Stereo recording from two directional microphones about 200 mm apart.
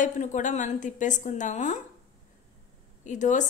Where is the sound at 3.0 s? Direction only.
40° left (ahead or behind).